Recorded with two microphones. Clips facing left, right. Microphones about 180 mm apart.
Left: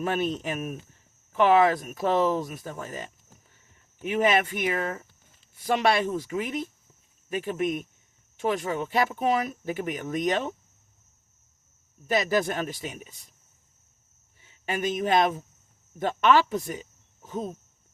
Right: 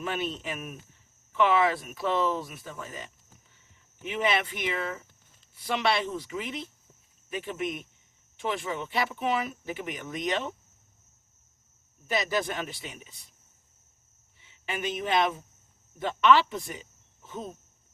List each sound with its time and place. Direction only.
0.0 s speech: 45° left (ahead or behind)
12.0 s speech: 45° left (ahead or behind)
14.4 s speech: 40° left (ahead or behind)